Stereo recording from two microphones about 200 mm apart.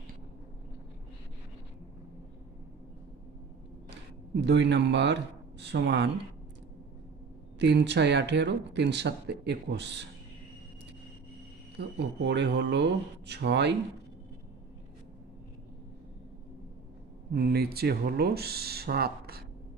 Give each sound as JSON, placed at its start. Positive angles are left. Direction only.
{"t": 4.5, "sound": "speech", "side_deg": -60}
{"t": 7.5, "sound": "speech", "side_deg": -60}
{"t": 11.7, "sound": "speech", "side_deg": -60}
{"t": 17.3, "sound": "speech", "side_deg": -50}